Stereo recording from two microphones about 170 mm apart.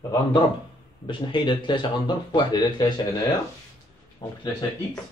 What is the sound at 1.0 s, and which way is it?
Speech, 30° left (ahead or behind).